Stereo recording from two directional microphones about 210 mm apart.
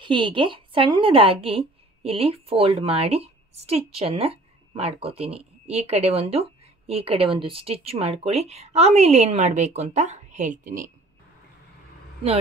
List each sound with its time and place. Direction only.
0.0 s a woman's voice: 25° right (ahead or behind)